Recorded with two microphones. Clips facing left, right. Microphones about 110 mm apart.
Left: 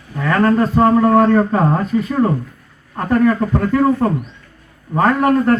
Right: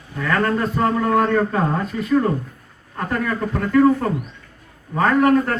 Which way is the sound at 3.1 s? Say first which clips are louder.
Left 9 dB; 25° left (ahead or behind).